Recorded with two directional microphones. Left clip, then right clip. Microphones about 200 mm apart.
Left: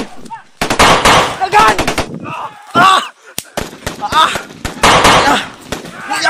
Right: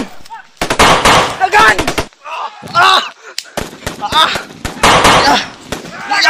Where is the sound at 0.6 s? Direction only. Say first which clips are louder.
Even; centre (ahead or behind).